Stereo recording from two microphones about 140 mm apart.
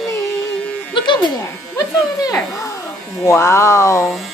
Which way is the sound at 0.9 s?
35° left (ahead or behind).